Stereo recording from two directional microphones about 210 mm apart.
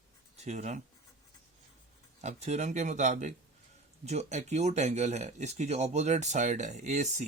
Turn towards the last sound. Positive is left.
turn(degrees=-35)  # may be behind; listen again after turning